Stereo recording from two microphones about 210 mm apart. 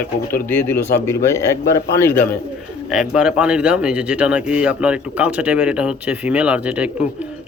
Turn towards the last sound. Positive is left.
turn(degrees=-5)  # may be behind; listen again after turning